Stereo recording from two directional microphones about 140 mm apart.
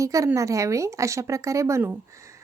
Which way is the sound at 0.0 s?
25° right (ahead or behind).